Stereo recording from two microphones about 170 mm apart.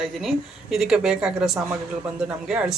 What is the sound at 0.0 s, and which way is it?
A woman's voice, centre (ahead or behind).